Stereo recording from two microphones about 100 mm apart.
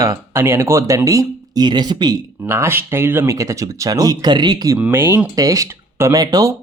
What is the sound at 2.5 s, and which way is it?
Speech, 25° right (ahead or behind).